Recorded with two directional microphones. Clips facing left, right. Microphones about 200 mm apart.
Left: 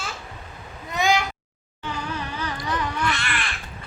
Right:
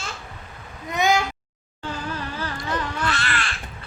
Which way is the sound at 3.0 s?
15° left (ahead or behind).